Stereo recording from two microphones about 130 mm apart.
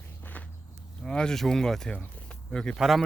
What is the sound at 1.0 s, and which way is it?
Speech, 5° left (ahead or behind).